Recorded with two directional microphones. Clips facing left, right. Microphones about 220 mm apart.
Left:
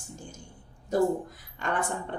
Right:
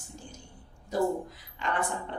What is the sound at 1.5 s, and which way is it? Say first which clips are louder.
Speech: left 1 dB; 50° left (ahead or behind).